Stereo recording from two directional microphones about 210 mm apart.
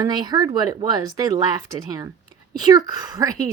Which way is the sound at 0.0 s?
20° right (ahead or behind).